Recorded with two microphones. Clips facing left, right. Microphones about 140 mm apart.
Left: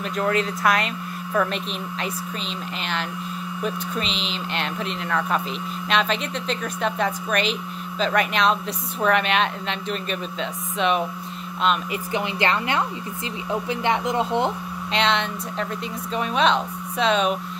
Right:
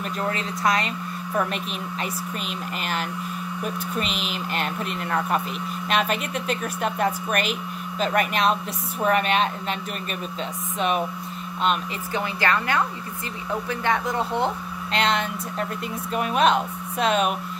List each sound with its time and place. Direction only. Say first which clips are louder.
3.6 s speech: left 1 dB; 5° right (ahead or behind)
12.1 s speech: left 1 dB; 20° left (ahead or behind)
15.0 s speech: left 1 dB; centre (ahead or behind)